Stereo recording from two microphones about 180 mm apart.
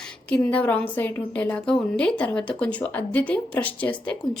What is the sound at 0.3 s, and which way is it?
A woman's voice, 10° left (ahead or behind).